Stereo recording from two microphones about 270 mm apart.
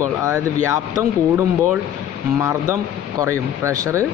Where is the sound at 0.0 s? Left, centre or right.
Centre.